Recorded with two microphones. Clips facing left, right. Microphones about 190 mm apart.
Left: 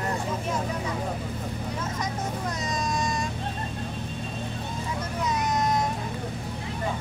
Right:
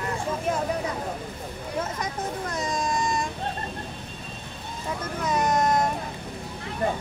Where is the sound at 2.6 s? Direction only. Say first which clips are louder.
Right 3 dB; 55° right (ahead or behind).